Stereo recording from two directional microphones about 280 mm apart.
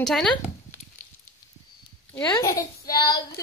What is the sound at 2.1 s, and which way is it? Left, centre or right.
Speech, centre.